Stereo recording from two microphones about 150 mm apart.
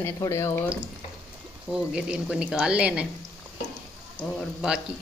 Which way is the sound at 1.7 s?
5° right (ahead or behind).